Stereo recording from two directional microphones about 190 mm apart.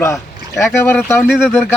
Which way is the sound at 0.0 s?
15° left (ahead or behind).